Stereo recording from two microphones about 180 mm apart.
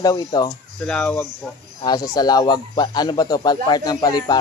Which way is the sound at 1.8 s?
20° left (ahead or behind).